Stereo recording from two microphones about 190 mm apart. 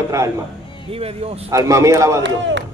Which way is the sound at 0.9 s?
30° right (ahead or behind).